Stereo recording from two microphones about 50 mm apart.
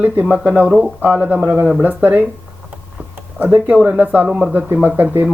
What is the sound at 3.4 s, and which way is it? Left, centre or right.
Speech, right.